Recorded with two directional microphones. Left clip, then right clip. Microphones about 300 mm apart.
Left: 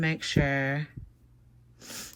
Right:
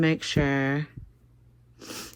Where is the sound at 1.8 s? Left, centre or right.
Centre.